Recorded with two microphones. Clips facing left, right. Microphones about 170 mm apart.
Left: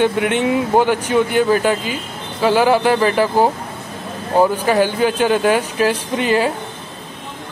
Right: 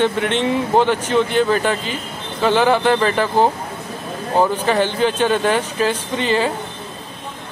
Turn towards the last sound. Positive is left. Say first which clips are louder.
# left 2 dB
turn(degrees=10)  # may be behind; listen again after turning